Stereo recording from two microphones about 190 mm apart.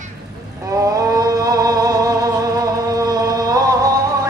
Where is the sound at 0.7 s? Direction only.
20° right (ahead or behind).